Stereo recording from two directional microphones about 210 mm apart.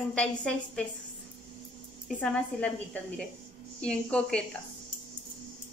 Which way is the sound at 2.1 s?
5° left (ahead or behind).